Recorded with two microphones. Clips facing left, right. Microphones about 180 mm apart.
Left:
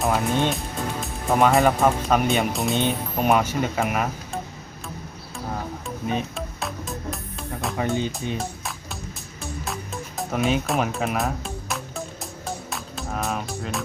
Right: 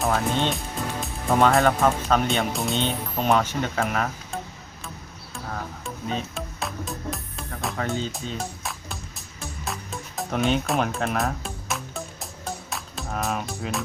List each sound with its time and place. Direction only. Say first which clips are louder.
0.0 s speech: left 2 dB; 5° left (ahead or behind)
2.8 s speech: left 2 dB; 15° left (ahead or behind)
5.5 s music: left 3 dB; 10° left (ahead or behind)
6.3 s music: left 1 dB; centre (ahead or behind)
7.8 s speech: left 4 dB; 15° left (ahead or behind)
8.4 s music: left 1 dB; centre (ahead or behind)